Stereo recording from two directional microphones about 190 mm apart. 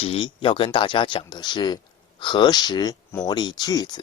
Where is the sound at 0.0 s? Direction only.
30° left (ahead or behind).